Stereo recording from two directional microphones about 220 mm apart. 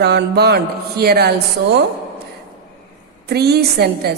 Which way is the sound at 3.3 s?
45° right (ahead or behind).